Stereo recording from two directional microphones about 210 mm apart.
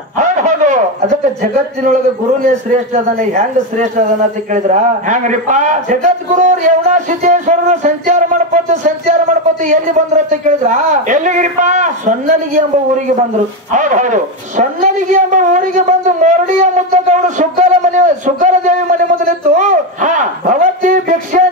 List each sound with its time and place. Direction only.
0.2 s a sound: 35° right (ahead or behind)
2.4 s a man's voice: 35° right (ahead or behind)
13.7 s a man's voice: 35° right (ahead or behind)